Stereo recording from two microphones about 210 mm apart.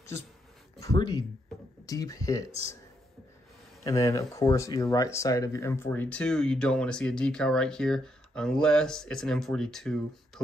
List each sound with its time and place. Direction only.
0.7 s speech: 15° left (ahead or behind)
3.8 s speech: 15° left (ahead or behind)